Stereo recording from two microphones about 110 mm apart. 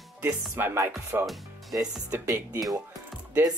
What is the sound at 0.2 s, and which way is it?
Speech, 20° right (ahead or behind).